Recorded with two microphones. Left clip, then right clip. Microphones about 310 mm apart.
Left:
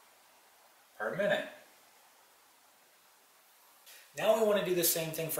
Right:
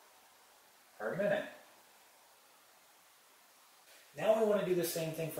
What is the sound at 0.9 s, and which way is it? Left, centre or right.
Speech, centre.